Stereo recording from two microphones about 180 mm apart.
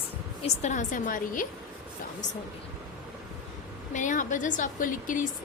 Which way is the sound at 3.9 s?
45° left (ahead or behind).